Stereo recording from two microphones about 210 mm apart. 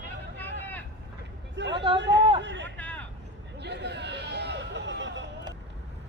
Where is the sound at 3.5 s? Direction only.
55° right (ahead or behind).